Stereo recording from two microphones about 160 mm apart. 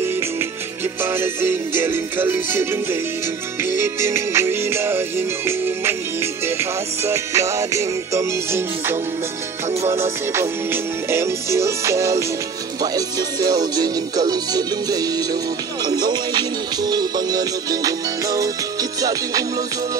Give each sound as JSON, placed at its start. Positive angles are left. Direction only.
{"t": 1.0, "sound": "music", "side_deg": -15}
{"t": 10.3, "sound": "music", "side_deg": -15}